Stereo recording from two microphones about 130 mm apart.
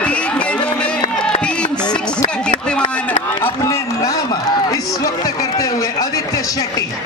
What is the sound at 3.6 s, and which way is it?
A man's voice, 20° left (ahead or behind).